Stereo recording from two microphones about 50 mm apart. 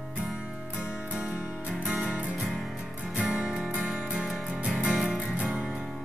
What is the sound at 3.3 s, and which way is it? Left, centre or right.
Music, right.